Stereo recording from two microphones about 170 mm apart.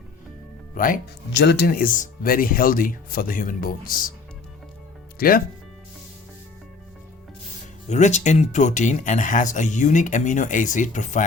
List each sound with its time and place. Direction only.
0.8 s speech: 55° left (ahead or behind)
1.3 s speech: 85° left; by 4.1 s 55° left (ahead or behind)
5.1 s speech: 60° left (ahead or behind)
7.9 s speech: 45° left (ahead or behind)